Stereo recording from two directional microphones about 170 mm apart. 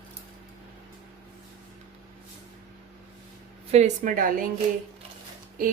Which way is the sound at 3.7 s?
40° right (ahead or behind).